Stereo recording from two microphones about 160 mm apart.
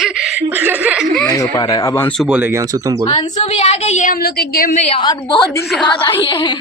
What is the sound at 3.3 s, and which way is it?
Speech, 40° left (ahead or behind).